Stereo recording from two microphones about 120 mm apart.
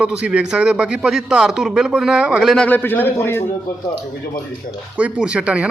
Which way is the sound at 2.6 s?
15° left (ahead or behind).